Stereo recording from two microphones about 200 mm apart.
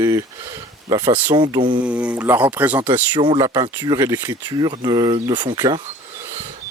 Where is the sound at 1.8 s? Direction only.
5° right (ahead or behind).